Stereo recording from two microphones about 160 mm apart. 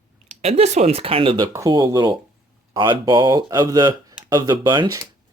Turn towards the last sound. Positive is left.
turn(degrees=-25)  # may be behind; listen again after turning